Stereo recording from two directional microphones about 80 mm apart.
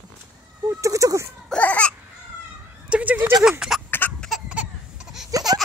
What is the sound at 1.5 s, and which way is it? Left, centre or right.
Baby cry, centre.